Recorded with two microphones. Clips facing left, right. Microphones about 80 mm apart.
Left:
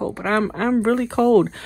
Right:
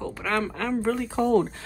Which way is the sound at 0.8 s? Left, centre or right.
Left.